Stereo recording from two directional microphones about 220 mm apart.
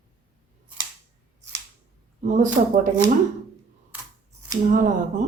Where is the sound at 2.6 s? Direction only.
35° right (ahead or behind).